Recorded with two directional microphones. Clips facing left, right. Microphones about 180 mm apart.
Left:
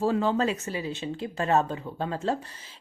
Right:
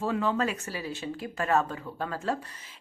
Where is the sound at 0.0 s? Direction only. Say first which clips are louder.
Left 3 dB; 30° left (ahead or behind).